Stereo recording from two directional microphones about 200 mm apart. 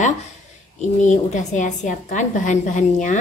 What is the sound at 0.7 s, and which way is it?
A woman's voice, 35° left (ahead or behind).